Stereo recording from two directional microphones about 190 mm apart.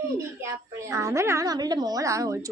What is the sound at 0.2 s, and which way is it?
A woman's voice, 15° right (ahead or behind).